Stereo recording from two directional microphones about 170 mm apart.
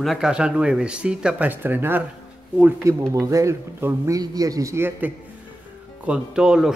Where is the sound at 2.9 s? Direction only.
20° right (ahead or behind).